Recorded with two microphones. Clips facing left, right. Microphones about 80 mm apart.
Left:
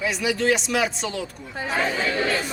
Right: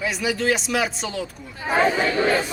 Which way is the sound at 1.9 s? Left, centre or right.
Centre.